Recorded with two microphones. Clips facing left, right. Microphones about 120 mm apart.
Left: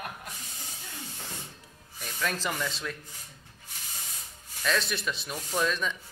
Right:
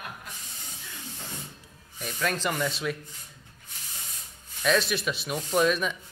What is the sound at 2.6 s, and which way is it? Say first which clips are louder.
Speech: right 5 dB; 10° right (ahead or behind).